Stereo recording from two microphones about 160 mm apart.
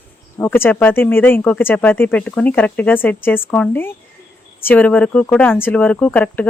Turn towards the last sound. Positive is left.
turn(degrees=10)  # may be behind; listen again after turning